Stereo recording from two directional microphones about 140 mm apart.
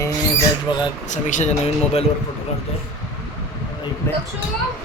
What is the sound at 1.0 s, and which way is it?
Speech, 60° left (ahead or behind).